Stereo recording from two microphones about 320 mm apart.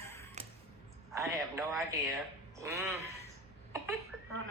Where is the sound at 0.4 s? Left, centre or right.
Right.